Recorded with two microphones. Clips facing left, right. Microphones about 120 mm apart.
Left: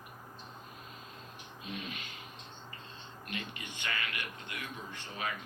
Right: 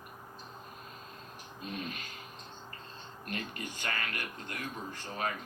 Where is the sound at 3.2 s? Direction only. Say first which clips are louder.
Right 3 dB; 40° right (ahead or behind).